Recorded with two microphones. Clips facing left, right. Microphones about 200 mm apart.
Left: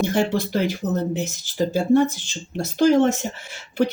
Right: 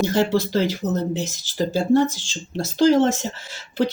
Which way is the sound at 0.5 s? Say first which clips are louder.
Right 1 dB; 15° left (ahead or behind).